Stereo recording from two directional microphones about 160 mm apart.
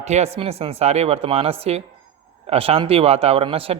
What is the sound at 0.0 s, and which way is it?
Speech, 45° right (ahead or behind).